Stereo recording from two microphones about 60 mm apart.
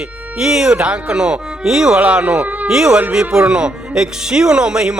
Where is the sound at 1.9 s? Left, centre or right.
Right.